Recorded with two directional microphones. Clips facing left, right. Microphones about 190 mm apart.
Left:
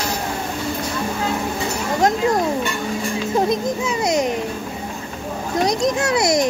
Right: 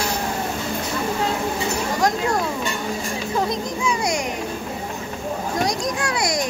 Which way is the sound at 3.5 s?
20° left (ahead or behind).